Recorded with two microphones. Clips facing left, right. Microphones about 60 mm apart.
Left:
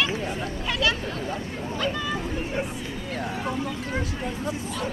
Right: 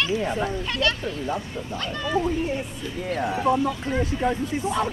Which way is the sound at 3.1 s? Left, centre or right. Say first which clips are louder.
Right 8 dB; centre.